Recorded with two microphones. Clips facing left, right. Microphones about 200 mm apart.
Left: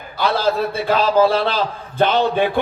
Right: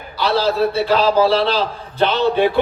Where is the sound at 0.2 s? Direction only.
50° left (ahead or behind).